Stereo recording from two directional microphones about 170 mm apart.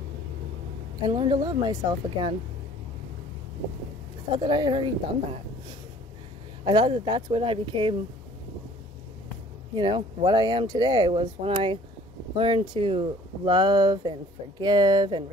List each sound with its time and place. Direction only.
1.0 s speech: 30° right (ahead or behind)
4.3 s speech: 25° right (ahead or behind)
6.6 s speech: 25° right (ahead or behind)
9.8 s speech: 25° right (ahead or behind)